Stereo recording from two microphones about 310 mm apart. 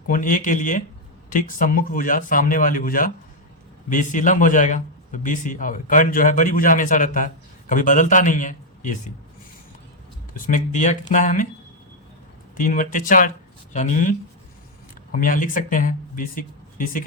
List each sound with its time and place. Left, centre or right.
0.1 s a man's voice: left
10.3 s a man's voice: left
12.5 s a man's voice: left